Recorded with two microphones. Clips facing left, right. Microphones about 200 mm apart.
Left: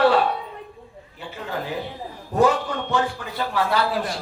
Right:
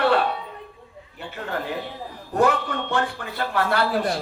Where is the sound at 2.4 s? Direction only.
60° right (ahead or behind).